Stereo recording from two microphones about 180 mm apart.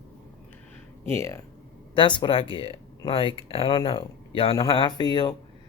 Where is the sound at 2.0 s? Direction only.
25° left (ahead or behind).